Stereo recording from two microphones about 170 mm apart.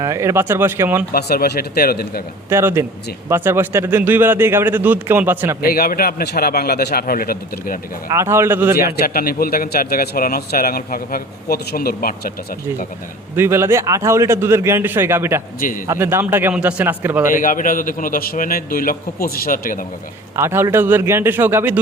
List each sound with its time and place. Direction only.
0.0 s a man's voice: 20° right (ahead or behind)
1.1 s a man's voice: 65° left (ahead or behind)
2.5 s a man's voice: 15° right (ahead or behind)
5.6 s a man's voice: 60° left (ahead or behind)
8.1 s a man's voice: 15° right (ahead or behind)
9.0 s a man's voice: 60° left (ahead or behind)
13.3 s a man's voice: 15° right (ahead or behind)
17.3 s a man's voice: 50° left (ahead or behind)
20.3 s a man's voice: 15° right (ahead or behind)